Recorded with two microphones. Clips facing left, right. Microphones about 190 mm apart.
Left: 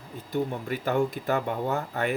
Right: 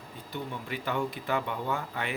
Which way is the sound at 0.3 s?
45° left (ahead or behind).